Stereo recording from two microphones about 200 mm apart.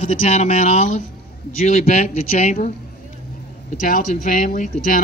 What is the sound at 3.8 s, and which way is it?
Speech, 45° left (ahead or behind).